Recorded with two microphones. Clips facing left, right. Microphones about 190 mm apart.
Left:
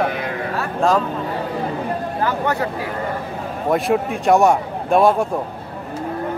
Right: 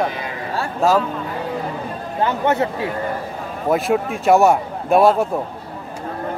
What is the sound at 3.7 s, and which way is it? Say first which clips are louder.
A man's voice: even; centre (ahead or behind).